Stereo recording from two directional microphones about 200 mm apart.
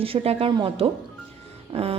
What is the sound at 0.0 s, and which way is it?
A woman's voice, 30° right (ahead or behind).